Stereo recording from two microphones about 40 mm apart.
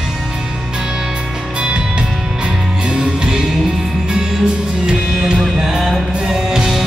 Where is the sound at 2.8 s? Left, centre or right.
Centre.